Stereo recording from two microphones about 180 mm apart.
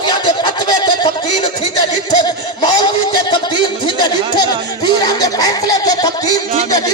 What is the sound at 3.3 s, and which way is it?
Music, 25° left (ahead or behind).